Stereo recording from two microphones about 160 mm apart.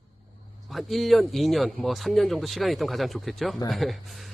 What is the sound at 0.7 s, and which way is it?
Speech, centre (ahead or behind).